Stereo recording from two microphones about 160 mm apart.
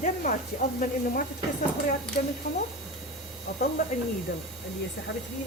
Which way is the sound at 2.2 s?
65° left (ahead or behind).